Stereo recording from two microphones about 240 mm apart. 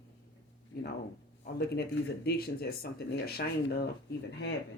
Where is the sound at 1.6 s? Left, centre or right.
Left.